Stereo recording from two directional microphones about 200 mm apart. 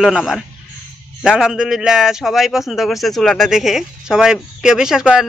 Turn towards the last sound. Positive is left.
turn(degrees=-5)  # may be behind; listen again after turning